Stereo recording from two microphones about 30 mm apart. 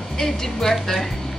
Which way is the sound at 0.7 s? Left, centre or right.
Centre.